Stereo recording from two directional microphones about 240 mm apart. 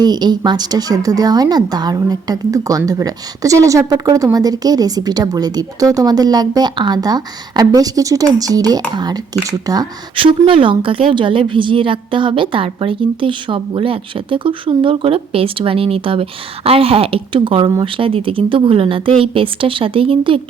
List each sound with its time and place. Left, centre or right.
0.0 s speech: centre